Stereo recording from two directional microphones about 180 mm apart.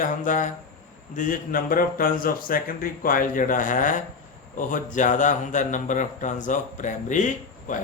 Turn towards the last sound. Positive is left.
turn(degrees=45)  # may be behind; listen again after turning